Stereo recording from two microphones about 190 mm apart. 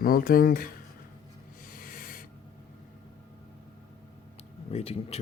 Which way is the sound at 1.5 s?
45° left (ahead or behind).